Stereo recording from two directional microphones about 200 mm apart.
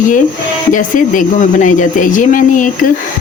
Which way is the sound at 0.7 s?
40° left (ahead or behind).